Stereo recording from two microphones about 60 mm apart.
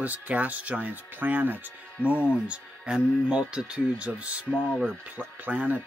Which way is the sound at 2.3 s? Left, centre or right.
Centre.